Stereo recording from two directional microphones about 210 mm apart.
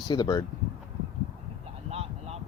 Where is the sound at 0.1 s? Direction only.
20° left (ahead or behind).